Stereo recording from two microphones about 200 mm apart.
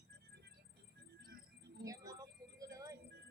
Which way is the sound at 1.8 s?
15° right (ahead or behind).